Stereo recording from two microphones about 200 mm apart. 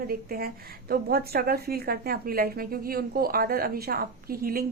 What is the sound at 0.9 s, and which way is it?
A woman's voice, 50° right (ahead or behind).